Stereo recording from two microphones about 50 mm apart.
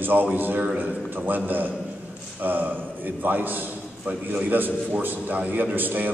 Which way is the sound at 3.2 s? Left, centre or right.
Right.